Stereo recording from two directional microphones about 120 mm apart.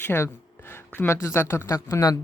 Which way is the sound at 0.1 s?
10° left (ahead or behind).